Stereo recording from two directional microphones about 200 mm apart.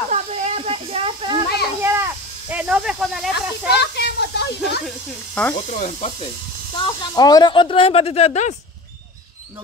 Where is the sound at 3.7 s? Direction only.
55° left (ahead or behind).